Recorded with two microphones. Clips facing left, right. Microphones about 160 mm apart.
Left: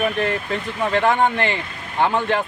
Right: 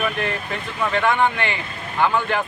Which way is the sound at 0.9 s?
30° left (ahead or behind).